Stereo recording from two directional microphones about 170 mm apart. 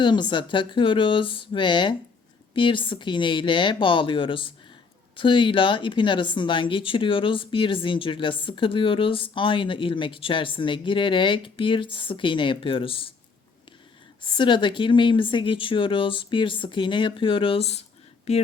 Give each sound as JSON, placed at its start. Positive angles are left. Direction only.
{"t": 0.0, "sound": "speech", "side_deg": 25}
{"t": 14.3, "sound": "speech", "side_deg": 30}